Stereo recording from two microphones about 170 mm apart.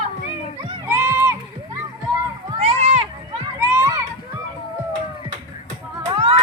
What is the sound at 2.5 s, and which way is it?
Run, 35° right (ahead or behind).